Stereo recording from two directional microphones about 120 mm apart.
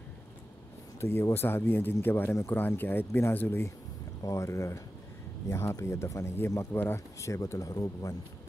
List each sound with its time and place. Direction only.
1.0 s speech: 20° left (ahead or behind)